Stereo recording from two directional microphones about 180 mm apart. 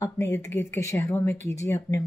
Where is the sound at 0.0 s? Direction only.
15° left (ahead or behind).